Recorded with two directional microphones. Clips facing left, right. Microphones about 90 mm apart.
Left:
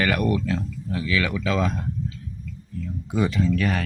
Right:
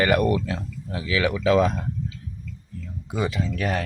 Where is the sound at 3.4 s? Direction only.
20° right (ahead or behind).